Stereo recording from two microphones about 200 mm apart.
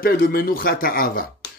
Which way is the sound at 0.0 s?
45° left (ahead or behind).